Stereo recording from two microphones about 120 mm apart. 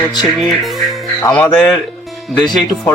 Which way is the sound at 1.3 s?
10° left (ahead or behind).